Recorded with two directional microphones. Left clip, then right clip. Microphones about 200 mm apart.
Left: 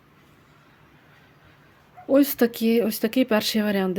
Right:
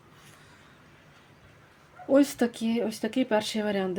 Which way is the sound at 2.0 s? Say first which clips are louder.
Left 4 dB; 20° left (ahead or behind).